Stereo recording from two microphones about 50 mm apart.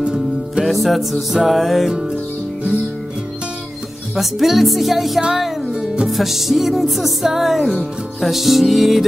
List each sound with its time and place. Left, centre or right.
0.0 s music: centre
0.7 s music: centre
4.1 s music: centre
6.0 s music: centre